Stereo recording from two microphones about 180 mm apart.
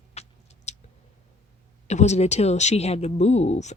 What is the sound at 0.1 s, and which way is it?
Rodents, 35° left (ahead or behind).